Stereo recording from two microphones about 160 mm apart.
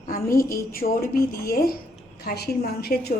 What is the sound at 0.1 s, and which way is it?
A woman's voice, 65° left (ahead or behind).